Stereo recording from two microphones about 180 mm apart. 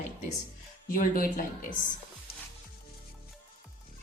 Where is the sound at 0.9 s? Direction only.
50° left (ahead or behind).